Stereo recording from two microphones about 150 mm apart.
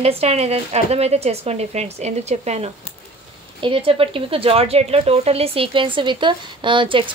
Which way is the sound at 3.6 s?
35° right (ahead or behind).